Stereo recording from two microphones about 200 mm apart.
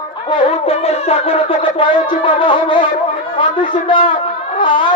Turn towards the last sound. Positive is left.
turn(degrees=25)  # may be behind; listen again after turning